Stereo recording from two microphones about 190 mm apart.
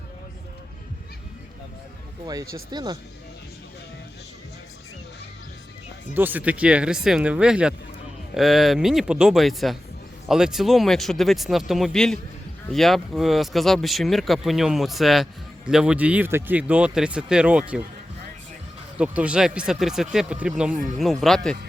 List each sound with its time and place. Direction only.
2.2 s speech: 20° right (ahead or behind)
6.1 s speech: 10° right (ahead or behind)
18.9 s speech: 5° right (ahead or behind)